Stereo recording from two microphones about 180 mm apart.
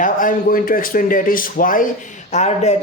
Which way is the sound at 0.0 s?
50° left (ahead or behind).